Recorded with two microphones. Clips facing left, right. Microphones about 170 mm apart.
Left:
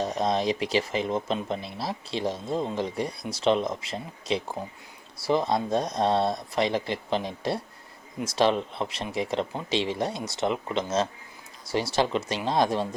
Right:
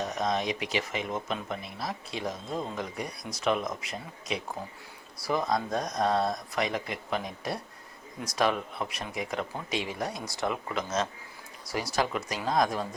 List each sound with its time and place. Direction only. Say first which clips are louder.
0.0 s speech: left 4 dB; 30° left (ahead or behind)